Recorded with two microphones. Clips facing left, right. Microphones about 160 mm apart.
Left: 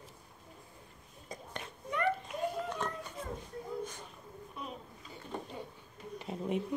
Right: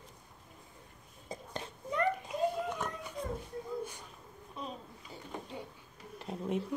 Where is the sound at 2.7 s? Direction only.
15° right (ahead or behind).